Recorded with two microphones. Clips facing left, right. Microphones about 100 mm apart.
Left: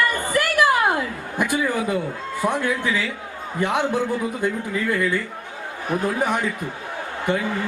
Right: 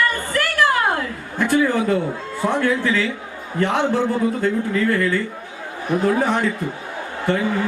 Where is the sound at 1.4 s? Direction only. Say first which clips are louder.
Right 4 dB; 15° left (ahead or behind).